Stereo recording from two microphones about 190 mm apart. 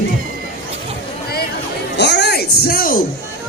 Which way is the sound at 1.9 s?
65° left (ahead or behind).